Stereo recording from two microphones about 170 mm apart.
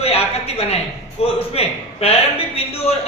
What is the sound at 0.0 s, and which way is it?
A woman's voice, 35° left (ahead or behind).